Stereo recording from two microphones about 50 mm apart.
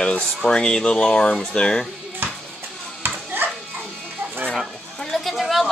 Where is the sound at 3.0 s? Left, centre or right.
Right.